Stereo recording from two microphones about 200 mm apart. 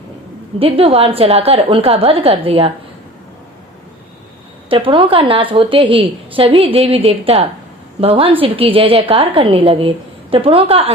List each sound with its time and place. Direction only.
0.6 s a woman's voice: 30° right (ahead or behind)
4.7 s a woman's voice: 25° right (ahead or behind)